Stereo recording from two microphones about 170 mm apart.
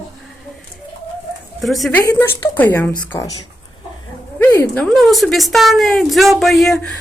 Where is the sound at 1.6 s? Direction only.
Centre (ahead or behind).